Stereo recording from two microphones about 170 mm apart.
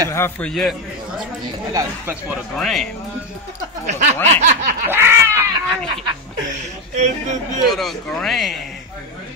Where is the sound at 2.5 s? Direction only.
Centre (ahead or behind).